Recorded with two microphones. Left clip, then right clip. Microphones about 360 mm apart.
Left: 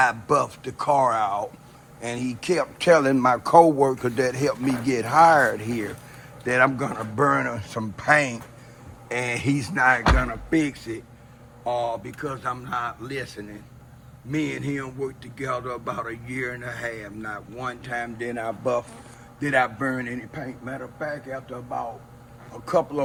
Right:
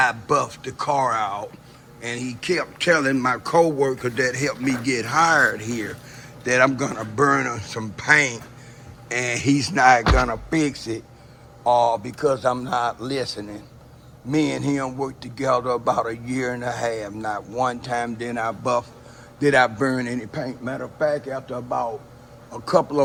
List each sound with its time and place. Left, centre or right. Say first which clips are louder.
0.0 s a man's voice: right 1 dB; centre